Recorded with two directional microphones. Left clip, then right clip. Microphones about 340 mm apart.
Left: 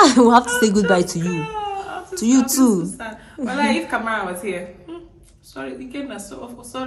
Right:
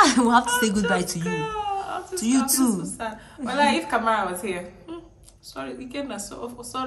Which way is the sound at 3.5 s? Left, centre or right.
Centre.